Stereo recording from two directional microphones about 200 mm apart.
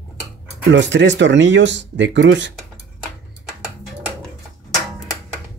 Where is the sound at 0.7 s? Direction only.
65° right (ahead or behind).